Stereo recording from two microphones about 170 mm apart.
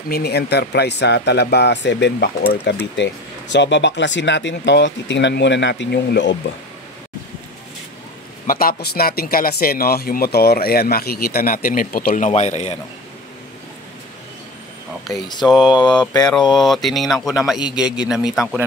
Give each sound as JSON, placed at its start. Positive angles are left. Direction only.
{"t": 0.1, "sound": "speech", "side_deg": 70}
{"t": 3.5, "sound": "speech", "side_deg": 90}
{"t": 8.5, "sound": "speech", "side_deg": 60}
{"t": 15.4, "sound": "speech", "side_deg": 0}